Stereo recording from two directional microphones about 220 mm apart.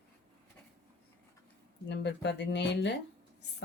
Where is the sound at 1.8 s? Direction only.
50° left (ahead or behind).